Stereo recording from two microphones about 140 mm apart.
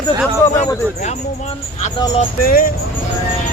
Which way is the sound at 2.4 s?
90° left.